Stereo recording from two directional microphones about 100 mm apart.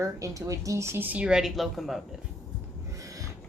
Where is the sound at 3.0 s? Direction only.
35° right (ahead or behind).